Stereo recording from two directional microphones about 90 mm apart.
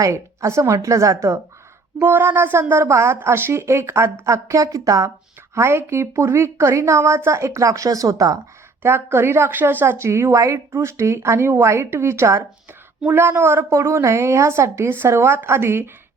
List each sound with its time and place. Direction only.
0.0 s a woman's voice: 35° right (ahead or behind)
2.0 s a woman's voice: 20° right (ahead or behind); by 8.4 s 40° right (ahead or behind)
8.8 s speech: 25° right (ahead or behind)
13.0 s a woman's voice: 20° right (ahead or behind)